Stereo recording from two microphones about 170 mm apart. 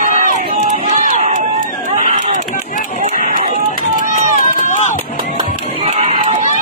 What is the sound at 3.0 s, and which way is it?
Run, 50° right (ahead or behind).